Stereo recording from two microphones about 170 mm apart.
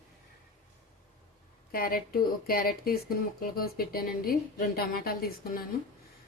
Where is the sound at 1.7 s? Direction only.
60° left (ahead or behind).